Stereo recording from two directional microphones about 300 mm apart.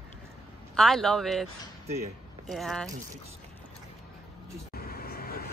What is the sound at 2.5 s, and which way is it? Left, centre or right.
Speech, centre.